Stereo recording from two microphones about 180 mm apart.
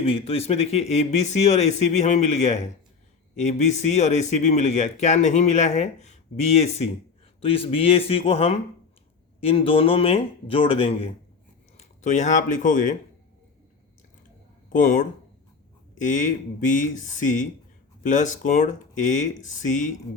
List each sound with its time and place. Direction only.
0.0 s speech: 30° left (ahead or behind)
11.8 s speech: 40° left (ahead or behind)
14.7 s speech: 45° left (ahead or behind)
16.6 s speech: 45° left (ahead or behind)